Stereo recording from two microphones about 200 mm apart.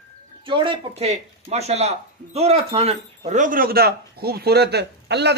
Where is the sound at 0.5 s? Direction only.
25° right (ahead or behind).